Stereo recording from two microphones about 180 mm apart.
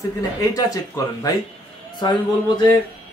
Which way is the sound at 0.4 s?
20° left (ahead or behind).